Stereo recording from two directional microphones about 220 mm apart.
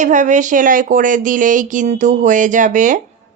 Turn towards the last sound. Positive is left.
turn(degrees=-35)  # may be behind; listen again after turning